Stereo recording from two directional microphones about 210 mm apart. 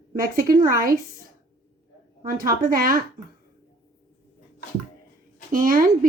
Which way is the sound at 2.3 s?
40° right (ahead or behind).